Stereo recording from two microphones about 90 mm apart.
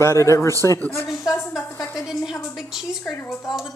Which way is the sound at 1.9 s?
5° right (ahead or behind).